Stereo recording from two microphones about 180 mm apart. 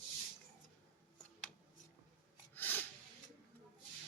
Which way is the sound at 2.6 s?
10° left (ahead or behind).